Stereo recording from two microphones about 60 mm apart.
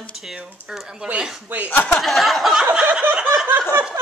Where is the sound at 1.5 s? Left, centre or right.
Right.